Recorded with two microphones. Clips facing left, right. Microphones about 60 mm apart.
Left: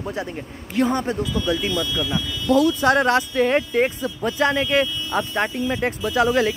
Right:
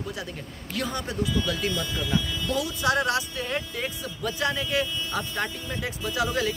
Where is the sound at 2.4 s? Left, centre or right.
Left.